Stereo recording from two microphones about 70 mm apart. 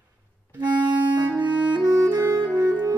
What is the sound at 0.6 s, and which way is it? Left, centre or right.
Clarinet, right.